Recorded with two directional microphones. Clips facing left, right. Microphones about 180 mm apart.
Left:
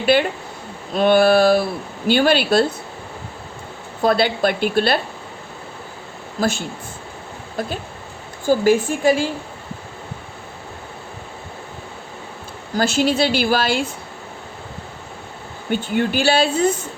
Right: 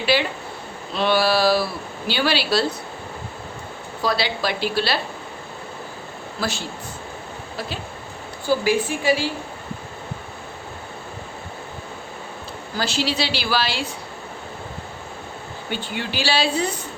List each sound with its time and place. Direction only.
0.0 s a woman's voice: 50° left (ahead or behind)
4.0 s a woman's voice: 50° left (ahead or behind)
6.4 s a woman's voice: 50° left (ahead or behind)
8.4 s a woman's voice: 45° left (ahead or behind)
12.7 s a woman's voice: 50° left (ahead or behind)
15.7 s a woman's voice: 50° left (ahead or behind)